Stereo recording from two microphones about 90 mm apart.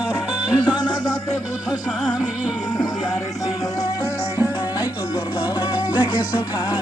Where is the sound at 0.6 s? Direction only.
55° left (ahead or behind).